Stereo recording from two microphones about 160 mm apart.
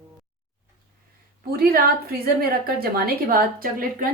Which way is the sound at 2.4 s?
70° right (ahead or behind).